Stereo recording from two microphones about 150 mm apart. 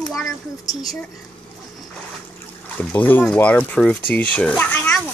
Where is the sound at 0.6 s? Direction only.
25° left (ahead or behind).